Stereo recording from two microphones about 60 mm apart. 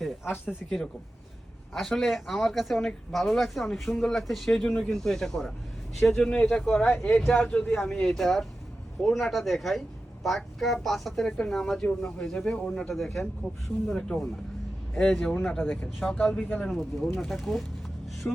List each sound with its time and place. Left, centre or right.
0.0 s a sound: centre
1.7 s speech: centre
6.2 s speech: centre
12.9 s speech: centre
16.6 s speech: centre
18.3 s speech: left